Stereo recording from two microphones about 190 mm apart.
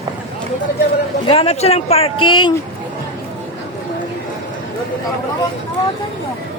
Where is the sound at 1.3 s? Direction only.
30° left (ahead or behind).